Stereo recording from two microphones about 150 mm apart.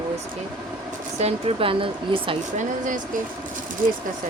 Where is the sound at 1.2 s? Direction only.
40° right (ahead or behind).